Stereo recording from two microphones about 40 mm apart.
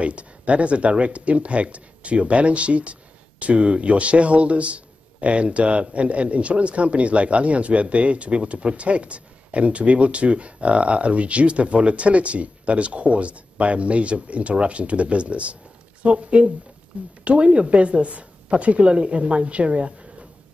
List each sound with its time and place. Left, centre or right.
0.0 s speech: right